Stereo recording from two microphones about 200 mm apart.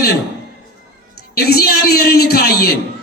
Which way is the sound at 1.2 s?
50° left (ahead or behind).